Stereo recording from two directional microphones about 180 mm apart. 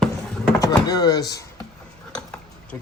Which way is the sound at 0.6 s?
20° left (ahead or behind).